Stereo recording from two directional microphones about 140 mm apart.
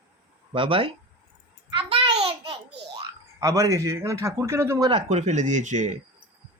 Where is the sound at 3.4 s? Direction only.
25° right (ahead or behind).